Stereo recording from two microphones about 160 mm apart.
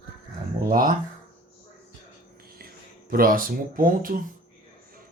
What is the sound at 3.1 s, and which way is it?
Speech, 65° right (ahead or behind).